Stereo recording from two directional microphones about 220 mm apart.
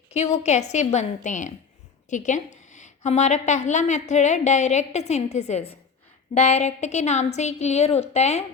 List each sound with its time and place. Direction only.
0.1 s a woman's voice: 30° left (ahead or behind)